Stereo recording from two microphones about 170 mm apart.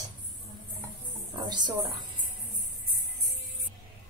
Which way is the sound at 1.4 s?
25° right (ahead or behind).